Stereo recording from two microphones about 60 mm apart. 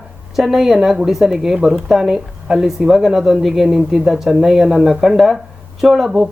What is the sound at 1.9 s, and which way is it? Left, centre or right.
Speech, centre.